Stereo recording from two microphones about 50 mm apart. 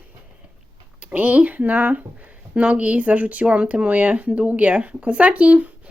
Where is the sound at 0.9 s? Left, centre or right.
Right.